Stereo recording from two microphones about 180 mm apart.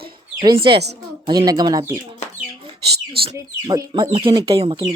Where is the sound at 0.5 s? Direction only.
30° right (ahead or behind).